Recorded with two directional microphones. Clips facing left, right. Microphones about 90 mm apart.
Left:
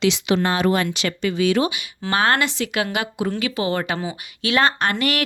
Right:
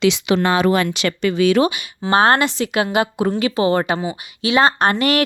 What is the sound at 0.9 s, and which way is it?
Speech, 75° right (ahead or behind).